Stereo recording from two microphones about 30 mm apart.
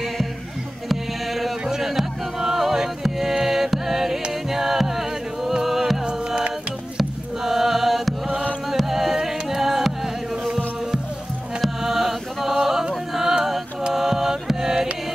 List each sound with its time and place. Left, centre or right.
0.8 s music: centre
7.4 s chant: centre
8.7 s music: centre
13.1 s a sound: centre
13.9 s mantra: centre